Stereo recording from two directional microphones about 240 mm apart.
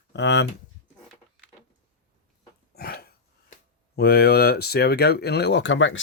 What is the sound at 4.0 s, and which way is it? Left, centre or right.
Speech, left.